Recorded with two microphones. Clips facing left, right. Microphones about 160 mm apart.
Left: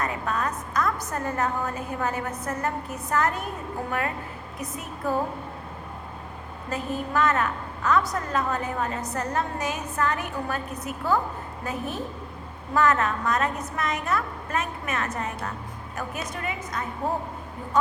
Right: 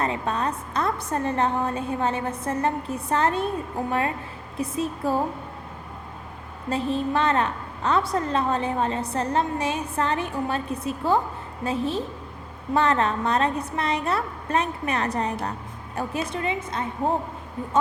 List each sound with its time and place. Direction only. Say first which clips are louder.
0.0 s a woman's voice: right 2 dB; 30° right (ahead or behind)
4.5 s a woman's voice: right 10 dB; 30° right (ahead or behind)
6.7 s a woman's voice: right 5 dB; 30° right (ahead or behind)